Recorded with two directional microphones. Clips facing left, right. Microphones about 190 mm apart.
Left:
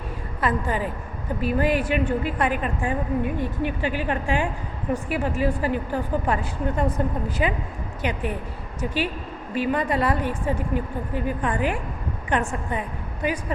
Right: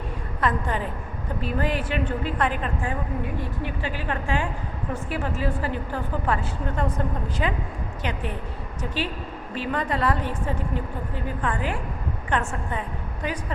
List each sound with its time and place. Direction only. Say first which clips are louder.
0.4 s a woman's voice: left 2 dB; 5° left (ahead or behind)
9.6 s a woman's voice: left 4 dB; 10° left (ahead or behind)